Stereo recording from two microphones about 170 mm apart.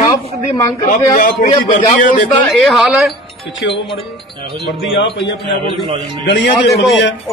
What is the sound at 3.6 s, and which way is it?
Speech, 90° left.